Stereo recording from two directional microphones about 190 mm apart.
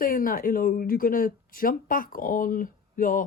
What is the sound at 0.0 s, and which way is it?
Speech, 45° left (ahead or behind).